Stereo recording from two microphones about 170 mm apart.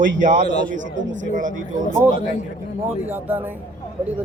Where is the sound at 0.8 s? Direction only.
90° right.